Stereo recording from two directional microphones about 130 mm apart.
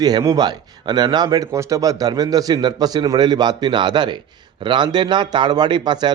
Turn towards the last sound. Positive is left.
turn(degrees=-35)  # may be behind; listen again after turning